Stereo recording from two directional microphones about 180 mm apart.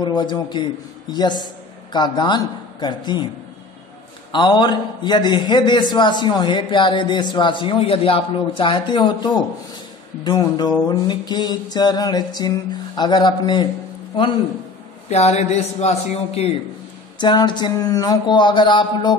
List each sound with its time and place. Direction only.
0.0 s a man's voice: 25° left (ahead or behind)
4.3 s a man's voice: 25° left (ahead or behind)
15.0 s a man's voice: 35° left (ahead or behind)
17.2 s a man's voice: 25° left (ahead or behind)